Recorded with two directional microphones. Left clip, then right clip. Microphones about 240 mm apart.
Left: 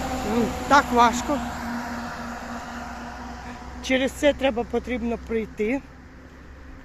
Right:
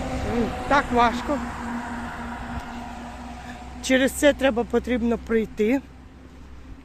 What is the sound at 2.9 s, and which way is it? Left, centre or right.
Vehicle, centre.